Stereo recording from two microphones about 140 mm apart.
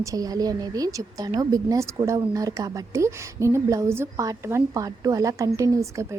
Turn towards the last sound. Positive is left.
turn(degrees=-20)  # may be behind; listen again after turning